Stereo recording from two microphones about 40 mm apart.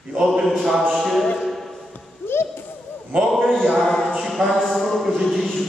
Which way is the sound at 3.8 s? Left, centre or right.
Centre.